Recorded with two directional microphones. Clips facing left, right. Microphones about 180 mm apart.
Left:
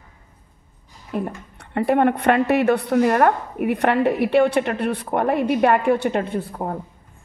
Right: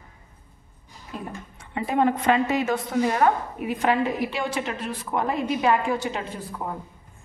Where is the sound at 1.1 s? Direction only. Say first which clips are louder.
Left 8 dB; 60° left (ahead or behind).